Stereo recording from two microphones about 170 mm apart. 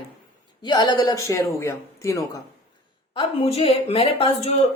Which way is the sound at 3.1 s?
30° left (ahead or behind).